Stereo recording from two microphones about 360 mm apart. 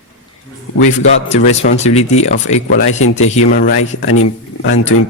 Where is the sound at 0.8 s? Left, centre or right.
Centre.